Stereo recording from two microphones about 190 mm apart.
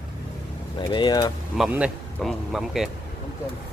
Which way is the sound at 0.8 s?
25° left (ahead or behind).